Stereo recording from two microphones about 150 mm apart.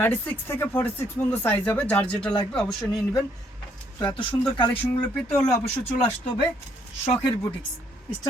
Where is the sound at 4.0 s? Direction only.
35° left (ahead or behind).